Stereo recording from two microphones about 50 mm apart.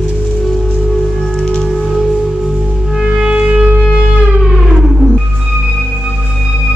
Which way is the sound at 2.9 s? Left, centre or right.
Centre.